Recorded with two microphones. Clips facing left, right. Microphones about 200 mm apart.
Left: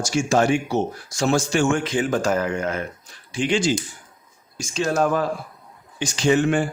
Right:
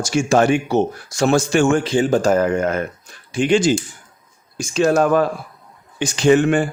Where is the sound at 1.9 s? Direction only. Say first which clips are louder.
Right 5 dB; 30° right (ahead or behind).